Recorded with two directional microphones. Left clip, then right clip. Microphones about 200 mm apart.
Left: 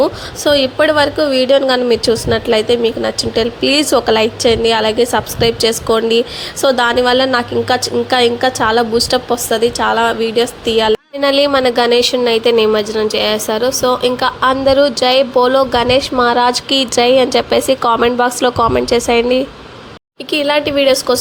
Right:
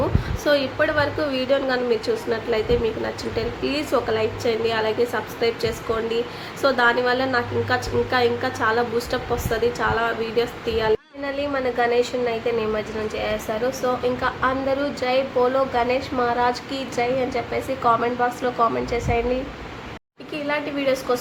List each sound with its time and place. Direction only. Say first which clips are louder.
0.0 s a woman's voice: left 10 dB; 35° left (ahead or behind)